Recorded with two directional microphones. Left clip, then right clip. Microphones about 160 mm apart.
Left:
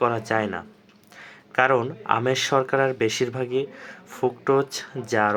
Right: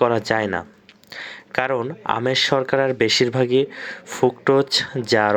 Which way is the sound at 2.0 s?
35° right (ahead or behind).